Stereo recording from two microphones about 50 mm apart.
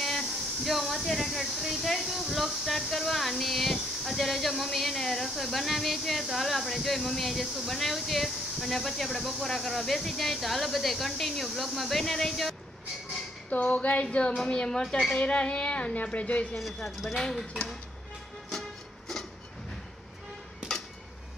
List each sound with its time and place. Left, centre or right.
0.0 s speech: centre
13.5 s speech: left
14.3 s a woman's voice: centre
15.1 s a woman's voice: left
16.5 s speech: centre
18.5 s music: centre